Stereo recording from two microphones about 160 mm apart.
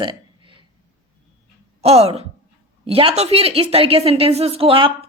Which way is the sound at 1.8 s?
40° right (ahead or behind).